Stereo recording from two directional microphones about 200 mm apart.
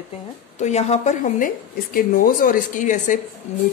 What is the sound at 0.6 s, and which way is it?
A woman's voice, 35° left (ahead or behind).